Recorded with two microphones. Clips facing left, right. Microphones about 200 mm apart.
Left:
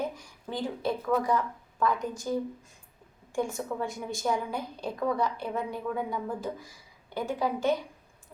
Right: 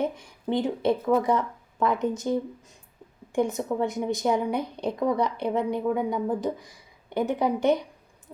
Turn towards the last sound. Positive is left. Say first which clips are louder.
# right 5 dB
turn(degrees=-20)  # may be behind; listen again after turning